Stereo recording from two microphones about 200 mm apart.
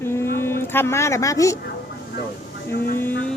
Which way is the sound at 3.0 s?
10° left (ahead or behind).